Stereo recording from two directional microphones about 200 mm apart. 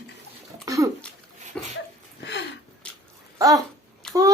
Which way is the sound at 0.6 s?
15° right (ahead or behind).